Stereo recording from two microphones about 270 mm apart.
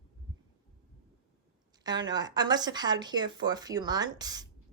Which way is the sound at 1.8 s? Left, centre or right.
Centre.